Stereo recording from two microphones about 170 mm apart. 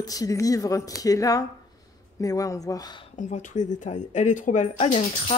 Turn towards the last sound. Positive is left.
turn(degrees=35)  # may be behind; listen again after turning